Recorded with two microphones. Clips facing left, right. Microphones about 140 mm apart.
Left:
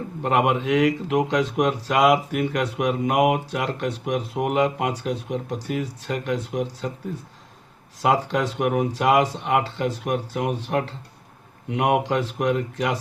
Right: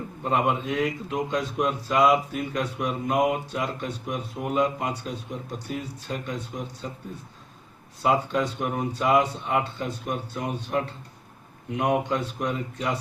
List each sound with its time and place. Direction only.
0.2 s a man's voice: 80° left
8.0 s a man's voice: 75° left (ahead or behind)